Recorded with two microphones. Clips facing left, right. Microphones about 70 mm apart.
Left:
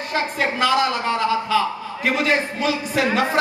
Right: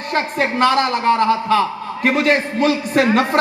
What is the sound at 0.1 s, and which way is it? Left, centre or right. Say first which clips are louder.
A man's voice: right 4 dB; right.